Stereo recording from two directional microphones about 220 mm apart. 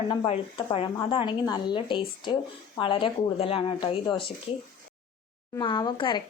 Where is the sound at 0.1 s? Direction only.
20° left (ahead or behind).